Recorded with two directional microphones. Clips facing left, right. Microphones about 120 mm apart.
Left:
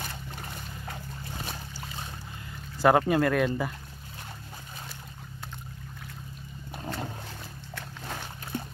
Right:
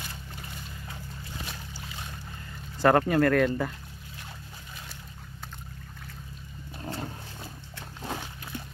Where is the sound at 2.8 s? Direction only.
15° left (ahead or behind).